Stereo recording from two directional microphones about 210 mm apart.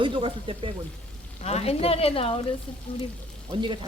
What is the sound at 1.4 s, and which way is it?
Speech, 30° left (ahead or behind).